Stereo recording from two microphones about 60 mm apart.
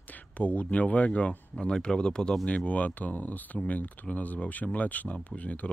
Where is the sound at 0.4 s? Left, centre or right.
Left.